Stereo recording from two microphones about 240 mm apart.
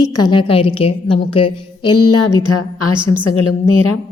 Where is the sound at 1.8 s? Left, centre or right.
Left.